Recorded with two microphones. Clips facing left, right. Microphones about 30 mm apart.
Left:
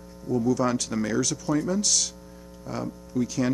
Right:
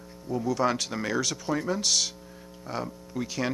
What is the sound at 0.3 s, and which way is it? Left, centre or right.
Speech, right.